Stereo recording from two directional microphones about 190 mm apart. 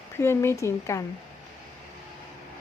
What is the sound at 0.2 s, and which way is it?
Speech, 15° left (ahead or behind).